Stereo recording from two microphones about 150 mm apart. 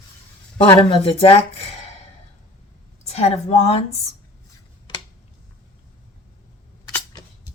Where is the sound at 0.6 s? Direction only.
40° left (ahead or behind).